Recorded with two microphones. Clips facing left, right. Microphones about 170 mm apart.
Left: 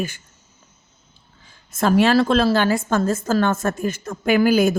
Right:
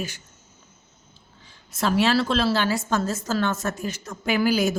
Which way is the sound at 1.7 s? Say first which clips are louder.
Left 5 dB; 50° left (ahead or behind).